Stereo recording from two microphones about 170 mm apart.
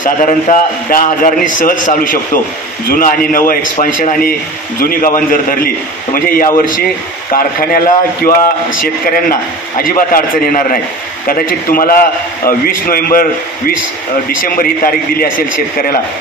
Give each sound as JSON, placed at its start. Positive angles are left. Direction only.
{"t": 0.0, "sound": "a man's voice", "side_deg": 50}
{"t": 14.3, "sound": "a man's voice", "side_deg": 55}